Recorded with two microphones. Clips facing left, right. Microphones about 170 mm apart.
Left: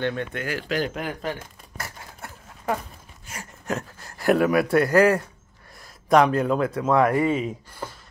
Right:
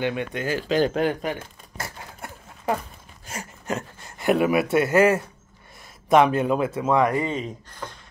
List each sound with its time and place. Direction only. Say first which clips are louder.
0.0 s speech: right 1 dB; 15° right (ahead or behind); by 1.1 s 30° right (ahead or behind)
1.8 s a sound: right 2 dB; 15° right (ahead or behind)
3.6 s speech: left 1 dB; centre (ahead or behind)